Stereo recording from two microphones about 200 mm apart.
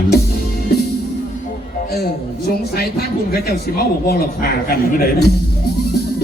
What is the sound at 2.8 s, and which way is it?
A man's voice, 50° left (ahead or behind).